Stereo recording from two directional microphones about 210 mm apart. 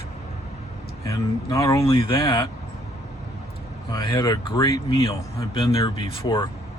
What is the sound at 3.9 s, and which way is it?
Speech, 20° left (ahead or behind).